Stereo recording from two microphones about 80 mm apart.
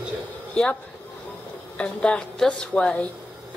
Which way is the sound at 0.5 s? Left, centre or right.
Centre.